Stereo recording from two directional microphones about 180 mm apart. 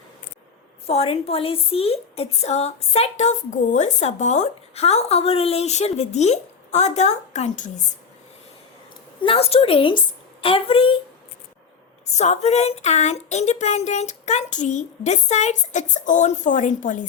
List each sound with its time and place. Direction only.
0.9 s a woman's voice: 35° left (ahead or behind)
9.2 s a woman's voice: 30° left (ahead or behind)
12.1 s a woman's voice: 40° left (ahead or behind)